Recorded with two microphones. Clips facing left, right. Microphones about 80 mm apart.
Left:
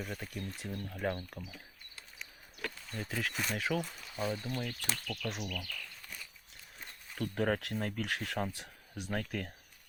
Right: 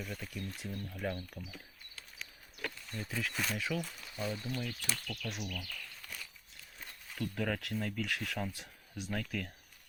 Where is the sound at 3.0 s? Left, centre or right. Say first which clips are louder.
Left 1 dB; left.